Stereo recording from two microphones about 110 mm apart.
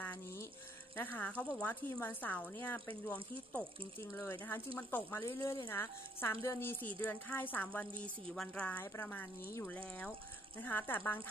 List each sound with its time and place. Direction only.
0.0 s water: 20° left (ahead or behind)
0.9 s a woman's voice: 15° left (ahead or behind)
8.7 s a woman's voice: 20° left (ahead or behind)